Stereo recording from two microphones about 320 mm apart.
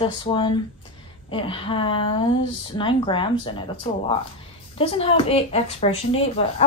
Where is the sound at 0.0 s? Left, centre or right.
Centre.